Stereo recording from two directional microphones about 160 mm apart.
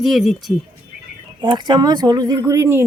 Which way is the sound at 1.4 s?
30° right (ahead or behind).